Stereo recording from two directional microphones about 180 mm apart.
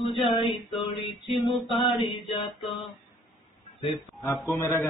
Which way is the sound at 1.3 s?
Centre (ahead or behind).